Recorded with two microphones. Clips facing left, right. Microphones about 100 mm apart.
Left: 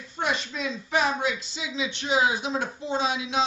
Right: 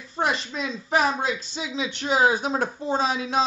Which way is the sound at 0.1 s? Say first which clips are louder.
Right 3 dB; 35° right (ahead or behind).